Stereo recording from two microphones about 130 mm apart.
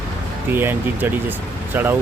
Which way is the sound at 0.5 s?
15° right (ahead or behind).